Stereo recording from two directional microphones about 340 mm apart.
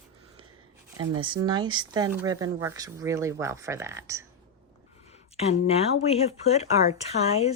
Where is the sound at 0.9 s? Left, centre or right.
Centre.